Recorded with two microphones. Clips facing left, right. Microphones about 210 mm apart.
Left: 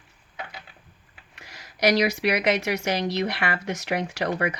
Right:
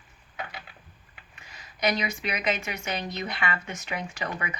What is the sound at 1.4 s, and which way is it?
A woman's voice, 75° left (ahead or behind).